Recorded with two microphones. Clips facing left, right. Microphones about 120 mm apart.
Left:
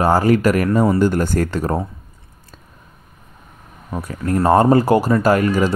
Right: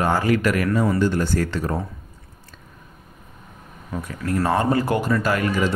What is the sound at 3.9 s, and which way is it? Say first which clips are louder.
Speech: left 4 dB; 40° left (ahead or behind).